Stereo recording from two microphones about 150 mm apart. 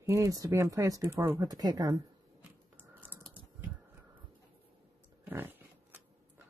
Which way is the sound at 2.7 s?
10° right (ahead or behind).